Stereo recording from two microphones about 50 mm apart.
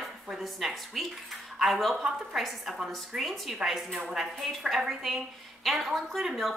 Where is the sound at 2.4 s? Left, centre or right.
Centre.